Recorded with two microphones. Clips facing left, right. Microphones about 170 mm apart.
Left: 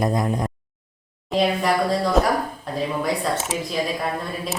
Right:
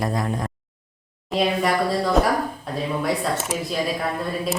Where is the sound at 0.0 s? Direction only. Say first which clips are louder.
Left 3 dB; 20° left (ahead or behind).